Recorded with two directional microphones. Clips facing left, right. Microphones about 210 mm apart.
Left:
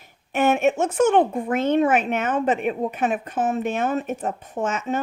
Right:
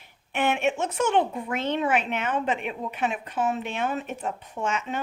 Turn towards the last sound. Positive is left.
turn(degrees=45)  # may be behind; listen again after turning